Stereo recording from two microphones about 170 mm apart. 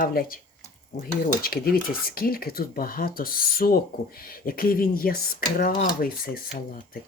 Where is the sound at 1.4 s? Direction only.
60° left (ahead or behind).